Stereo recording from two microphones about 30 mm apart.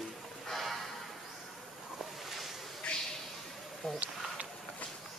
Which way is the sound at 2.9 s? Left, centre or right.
Left.